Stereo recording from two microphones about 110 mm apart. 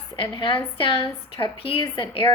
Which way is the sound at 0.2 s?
50° left (ahead or behind).